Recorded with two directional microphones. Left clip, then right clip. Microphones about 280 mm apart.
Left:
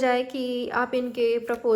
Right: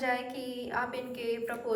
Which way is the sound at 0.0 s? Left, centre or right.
Left.